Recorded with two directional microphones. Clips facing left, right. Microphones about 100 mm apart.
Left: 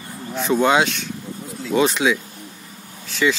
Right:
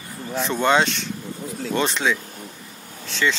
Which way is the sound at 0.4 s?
5° left (ahead or behind).